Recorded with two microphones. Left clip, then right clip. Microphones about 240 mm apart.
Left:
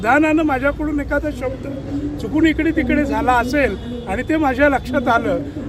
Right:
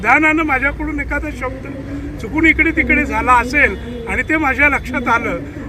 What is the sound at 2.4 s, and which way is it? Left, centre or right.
Speech, centre.